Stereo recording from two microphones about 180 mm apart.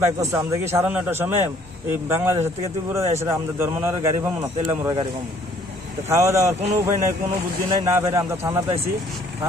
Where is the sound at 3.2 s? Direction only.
15° right (ahead or behind).